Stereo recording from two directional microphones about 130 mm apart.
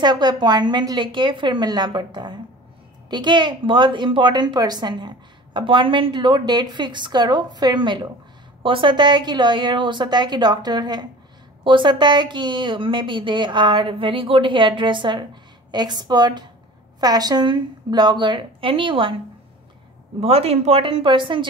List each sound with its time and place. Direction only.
0.0 s a woman's voice: 35° right (ahead or behind)
20.2 s a woman's voice: 50° right (ahead or behind)